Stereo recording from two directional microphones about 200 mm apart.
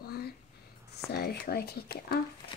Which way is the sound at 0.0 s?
50° left (ahead or behind).